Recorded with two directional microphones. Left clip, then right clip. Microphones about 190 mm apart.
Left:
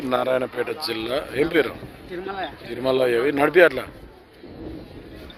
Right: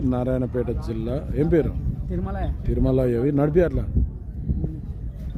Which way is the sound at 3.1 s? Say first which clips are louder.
Left 3 dB; centre (ahead or behind).